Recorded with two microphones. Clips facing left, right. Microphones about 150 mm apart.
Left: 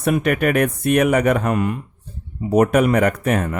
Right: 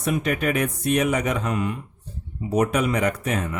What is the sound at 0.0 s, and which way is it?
Speech, 60° left (ahead or behind).